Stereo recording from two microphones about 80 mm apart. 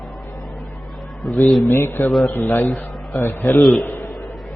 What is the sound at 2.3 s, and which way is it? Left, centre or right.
Speech, left.